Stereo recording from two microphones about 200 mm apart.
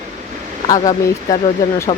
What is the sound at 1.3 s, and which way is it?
Speech, 15° left (ahead or behind).